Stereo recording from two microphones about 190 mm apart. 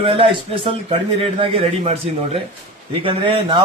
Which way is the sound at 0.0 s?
30° right (ahead or behind).